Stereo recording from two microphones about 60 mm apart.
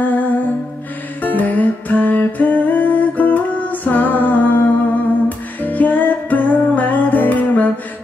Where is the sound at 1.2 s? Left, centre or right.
Left.